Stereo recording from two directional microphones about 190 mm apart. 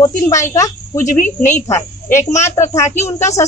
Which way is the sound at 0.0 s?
15° left (ahead or behind).